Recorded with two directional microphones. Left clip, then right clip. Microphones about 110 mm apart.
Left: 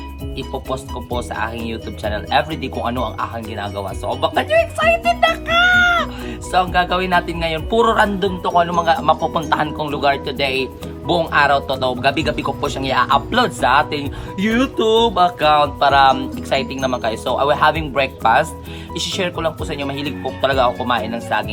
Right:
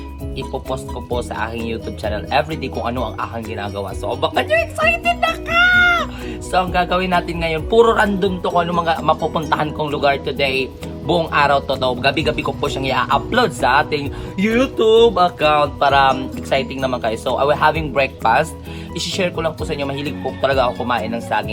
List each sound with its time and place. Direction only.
0.7 s speech: 10° left (ahead or behind)